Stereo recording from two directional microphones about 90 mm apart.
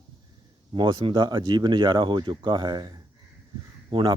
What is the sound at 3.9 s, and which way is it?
Speech, 75° right (ahead or behind).